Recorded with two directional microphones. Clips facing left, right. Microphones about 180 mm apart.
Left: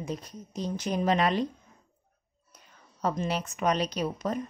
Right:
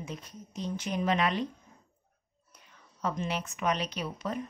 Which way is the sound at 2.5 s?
40° left (ahead or behind).